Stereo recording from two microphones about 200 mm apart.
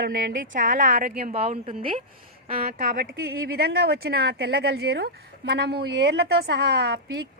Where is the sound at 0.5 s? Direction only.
40° right (ahead or behind).